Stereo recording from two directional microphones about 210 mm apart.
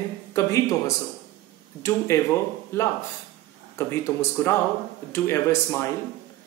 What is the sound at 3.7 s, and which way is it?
Speech, 10° left (ahead or behind).